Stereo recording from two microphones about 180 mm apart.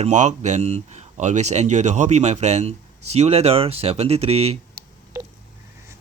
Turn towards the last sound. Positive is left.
turn(degrees=-35)  # may be behind; listen again after turning